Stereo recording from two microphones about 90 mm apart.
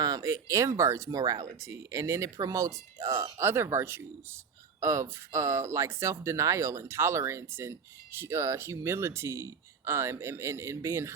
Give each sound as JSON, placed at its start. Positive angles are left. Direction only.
{"t": 0.0, "sound": "speech", "side_deg": -40}